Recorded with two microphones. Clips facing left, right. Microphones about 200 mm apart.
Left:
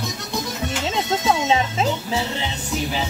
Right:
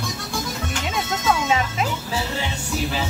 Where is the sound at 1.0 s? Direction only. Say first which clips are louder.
Left 2 dB; 25° left (ahead or behind).